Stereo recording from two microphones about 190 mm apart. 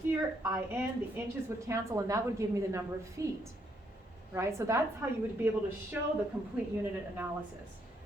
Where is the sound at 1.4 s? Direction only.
15° right (ahead or behind).